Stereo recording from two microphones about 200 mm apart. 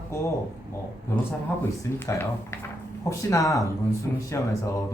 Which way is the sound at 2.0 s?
15° left (ahead or behind).